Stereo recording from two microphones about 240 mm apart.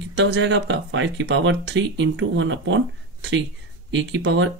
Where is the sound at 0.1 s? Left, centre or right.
Right.